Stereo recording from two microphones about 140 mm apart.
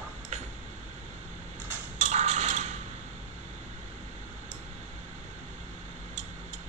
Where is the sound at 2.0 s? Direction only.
55° right (ahead or behind).